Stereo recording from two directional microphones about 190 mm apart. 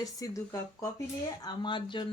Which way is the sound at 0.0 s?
15° left (ahead or behind).